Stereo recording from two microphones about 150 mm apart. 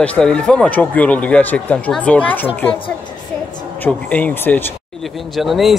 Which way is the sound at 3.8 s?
10° left (ahead or behind).